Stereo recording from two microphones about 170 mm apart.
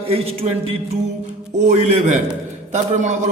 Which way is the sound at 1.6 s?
45° right (ahead or behind).